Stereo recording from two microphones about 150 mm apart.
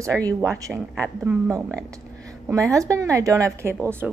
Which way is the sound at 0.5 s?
20° right (ahead or behind).